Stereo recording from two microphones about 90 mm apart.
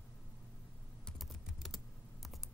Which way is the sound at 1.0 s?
Centre (ahead or behind).